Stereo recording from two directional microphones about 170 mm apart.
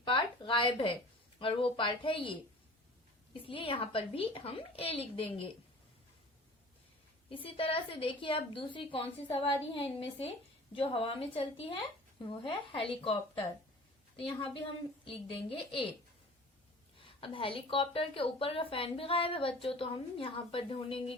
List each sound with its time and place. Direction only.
0.0 s a sound: 30° left (ahead or behind)
1.4 s a woman's voice: 30° left (ahead or behind)
3.4 s a woman's voice: 30° left (ahead or behind)
7.3 s a woman's voice: 30° left (ahead or behind)
17.0 s a woman's voice: 30° left (ahead or behind)